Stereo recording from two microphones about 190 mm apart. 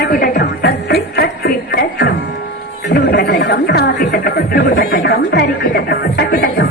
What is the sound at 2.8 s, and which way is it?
Speech, 50° left (ahead or behind).